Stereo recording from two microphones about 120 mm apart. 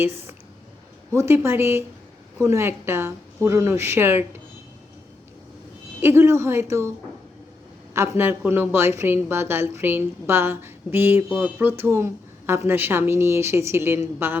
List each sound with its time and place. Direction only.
0.0 s a woman's voice: 20° right (ahead or behind)
6.0 s a woman's voice: 20° right (ahead or behind)
7.9 s a woman's voice: 20° right (ahead or behind)